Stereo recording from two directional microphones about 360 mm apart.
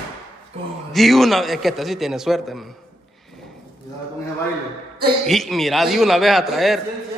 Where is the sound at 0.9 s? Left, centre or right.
Centre.